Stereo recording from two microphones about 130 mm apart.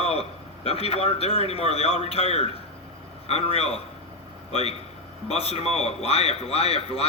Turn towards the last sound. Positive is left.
turn(degrees=50)  # may be behind; listen again after turning